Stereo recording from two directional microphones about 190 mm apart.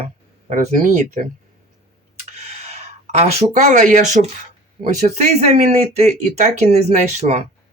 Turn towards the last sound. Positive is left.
turn(degrees=-35)  # may be behind; listen again after turning